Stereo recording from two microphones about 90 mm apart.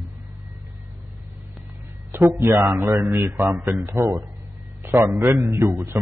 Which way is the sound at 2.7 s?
40° right (ahead or behind).